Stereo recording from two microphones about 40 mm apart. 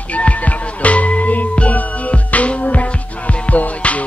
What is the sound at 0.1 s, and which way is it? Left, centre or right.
Music, left.